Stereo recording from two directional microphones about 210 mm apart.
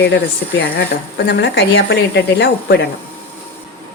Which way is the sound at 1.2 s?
55° left (ahead or behind).